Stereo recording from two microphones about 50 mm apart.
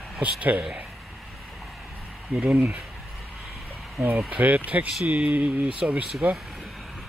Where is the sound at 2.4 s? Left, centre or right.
Right.